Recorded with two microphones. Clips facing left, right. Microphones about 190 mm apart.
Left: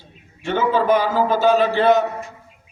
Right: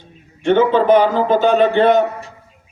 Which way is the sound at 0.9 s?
5° left (ahead or behind).